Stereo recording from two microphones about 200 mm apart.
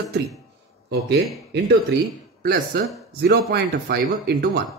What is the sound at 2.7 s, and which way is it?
A man's voice, 55° right (ahead or behind).